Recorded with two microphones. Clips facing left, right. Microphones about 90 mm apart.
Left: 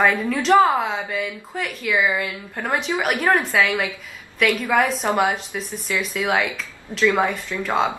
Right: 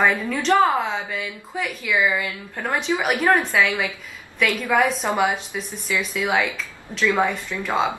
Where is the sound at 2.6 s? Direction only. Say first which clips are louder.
Even; 15° left (ahead or behind).